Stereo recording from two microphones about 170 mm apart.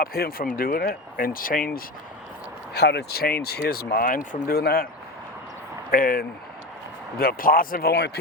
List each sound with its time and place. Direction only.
0.0 s speech: 65° left (ahead or behind)
2.7 s speech: 75° left (ahead or behind)
5.9 s speech: 60° left (ahead or behind); by 8.2 s 75° left (ahead or behind)